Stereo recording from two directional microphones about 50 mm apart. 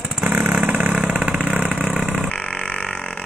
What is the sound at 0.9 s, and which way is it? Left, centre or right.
Vehicle, centre.